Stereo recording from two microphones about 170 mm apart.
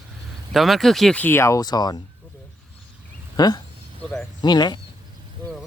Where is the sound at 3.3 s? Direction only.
25° left (ahead or behind).